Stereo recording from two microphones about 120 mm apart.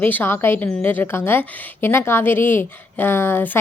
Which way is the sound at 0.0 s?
15° left (ahead or behind).